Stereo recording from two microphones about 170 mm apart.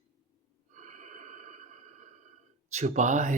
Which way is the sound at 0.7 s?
45° right (ahead or behind).